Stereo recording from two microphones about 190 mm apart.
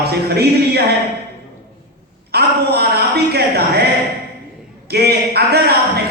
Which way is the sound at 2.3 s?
60° right (ahead or behind).